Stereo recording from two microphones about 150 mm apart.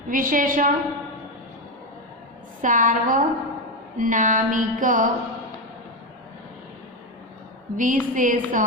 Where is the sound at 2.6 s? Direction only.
60° right (ahead or behind).